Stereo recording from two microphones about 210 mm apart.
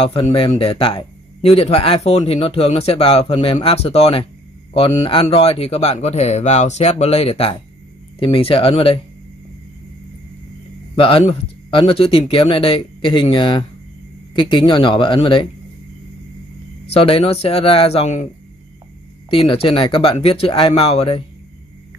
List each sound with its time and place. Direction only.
0.0 s speech: 25° left (ahead or behind)
11.0 s speech: 25° left (ahead or behind)
16.9 s speech: 25° left (ahead or behind)
19.3 s speech: 25° left (ahead or behind)